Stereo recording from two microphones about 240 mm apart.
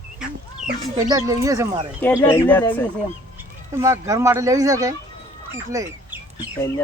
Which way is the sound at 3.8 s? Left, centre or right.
Centre.